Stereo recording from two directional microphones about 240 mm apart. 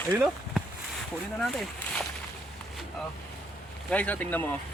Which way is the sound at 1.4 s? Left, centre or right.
Centre.